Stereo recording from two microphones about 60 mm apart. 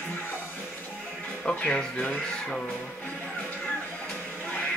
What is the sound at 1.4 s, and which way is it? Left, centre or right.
Speech, centre.